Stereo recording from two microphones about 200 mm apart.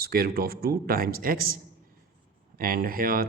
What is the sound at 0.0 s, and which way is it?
Speech, 50° right (ahead or behind).